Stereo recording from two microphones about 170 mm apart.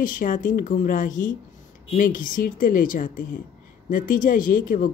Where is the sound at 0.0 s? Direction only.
50° left (ahead or behind).